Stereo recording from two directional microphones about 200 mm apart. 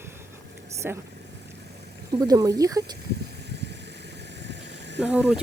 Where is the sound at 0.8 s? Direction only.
10° right (ahead or behind).